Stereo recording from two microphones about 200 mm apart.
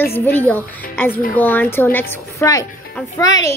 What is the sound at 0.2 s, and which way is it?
A woman's voice, 10° left (ahead or behind).